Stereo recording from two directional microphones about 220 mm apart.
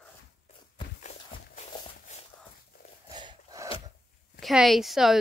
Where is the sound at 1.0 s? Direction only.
30° left (ahead or behind).